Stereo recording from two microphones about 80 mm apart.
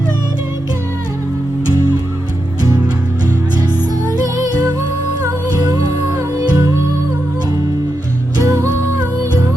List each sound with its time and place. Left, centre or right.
5.2 s music: right
8.4 s music: right